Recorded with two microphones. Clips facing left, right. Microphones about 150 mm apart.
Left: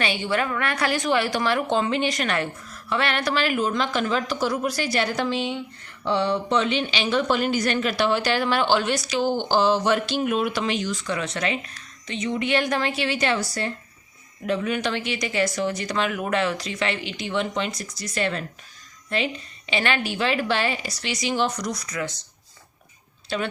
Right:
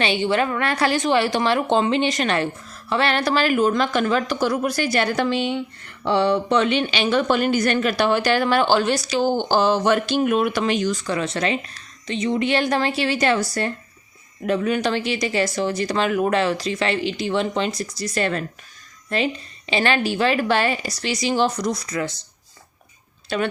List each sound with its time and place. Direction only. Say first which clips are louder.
0.0 s a woman's voice: right 4 dB; 25° right (ahead or behind)
23.3 s speech: right 4 dB; 55° right (ahead or behind)